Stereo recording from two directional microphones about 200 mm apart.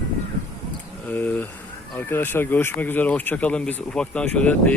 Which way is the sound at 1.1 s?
10° left (ahead or behind).